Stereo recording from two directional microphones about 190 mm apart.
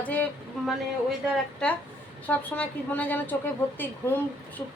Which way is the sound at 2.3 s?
10° left (ahead or behind).